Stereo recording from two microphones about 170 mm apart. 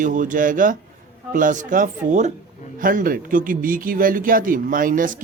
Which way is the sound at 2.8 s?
55° right (ahead or behind).